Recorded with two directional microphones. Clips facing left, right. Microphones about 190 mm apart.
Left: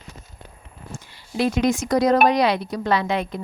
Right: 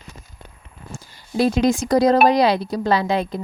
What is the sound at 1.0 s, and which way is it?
A woman's voice, 40° right (ahead or behind).